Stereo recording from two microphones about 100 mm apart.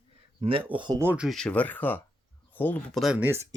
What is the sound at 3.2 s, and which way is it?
Speech, 25° right (ahead or behind).